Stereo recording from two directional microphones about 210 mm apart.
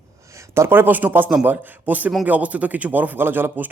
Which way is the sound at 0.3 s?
15° right (ahead or behind).